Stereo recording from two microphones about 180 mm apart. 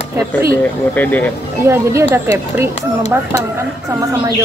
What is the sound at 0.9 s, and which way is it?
Speech, 10° left (ahead or behind).